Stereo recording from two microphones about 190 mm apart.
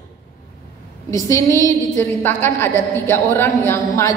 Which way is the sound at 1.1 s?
15° left (ahead or behind).